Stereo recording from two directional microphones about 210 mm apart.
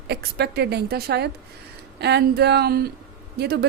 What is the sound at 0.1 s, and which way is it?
A woman's voice, 50° right (ahead or behind).